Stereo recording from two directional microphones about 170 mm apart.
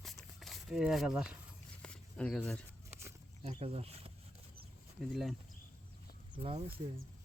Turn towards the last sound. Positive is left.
turn(degrees=-35)  # may be behind; listen again after turning